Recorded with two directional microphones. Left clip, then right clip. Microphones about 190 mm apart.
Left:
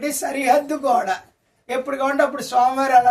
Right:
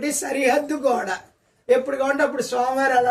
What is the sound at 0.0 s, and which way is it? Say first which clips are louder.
A man's voice: even; 25° left (ahead or behind).